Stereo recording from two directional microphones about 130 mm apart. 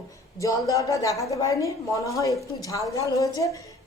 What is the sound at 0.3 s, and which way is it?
A woman's voice, 25° left (ahead or behind).